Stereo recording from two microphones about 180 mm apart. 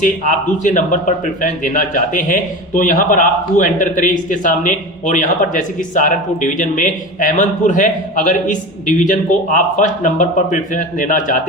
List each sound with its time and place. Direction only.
0.0 s a man's voice: 45° left (ahead or behind)